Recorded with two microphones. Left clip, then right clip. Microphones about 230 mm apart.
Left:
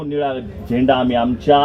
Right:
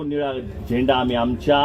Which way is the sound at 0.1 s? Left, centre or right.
Centre.